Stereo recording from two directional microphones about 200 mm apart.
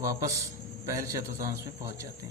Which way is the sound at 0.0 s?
15° right (ahead or behind).